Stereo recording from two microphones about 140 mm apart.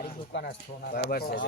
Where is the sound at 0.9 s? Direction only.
90° left.